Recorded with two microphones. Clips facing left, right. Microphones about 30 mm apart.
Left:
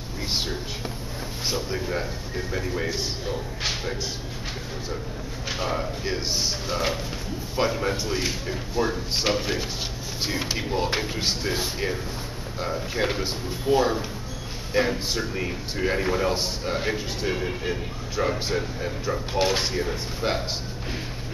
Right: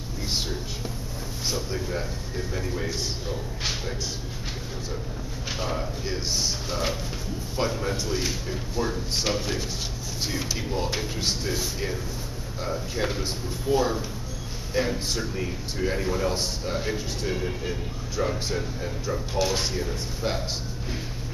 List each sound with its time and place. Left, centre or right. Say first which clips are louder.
1.5 s a man's voice: left 2 dB; centre
5.5 s a man's voice: left 2 dB; centre